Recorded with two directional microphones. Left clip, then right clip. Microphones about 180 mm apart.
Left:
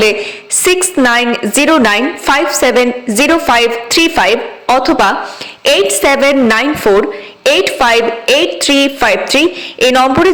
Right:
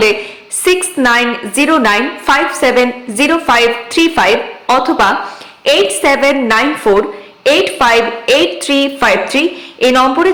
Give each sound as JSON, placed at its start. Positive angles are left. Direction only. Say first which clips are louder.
{"t": 0.0, "sound": "a woman's voice", "louder": "left 1 dB", "side_deg": 25}